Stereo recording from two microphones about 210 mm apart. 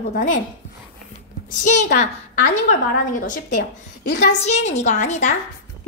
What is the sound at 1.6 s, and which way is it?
Speech, 35° left (ahead or behind).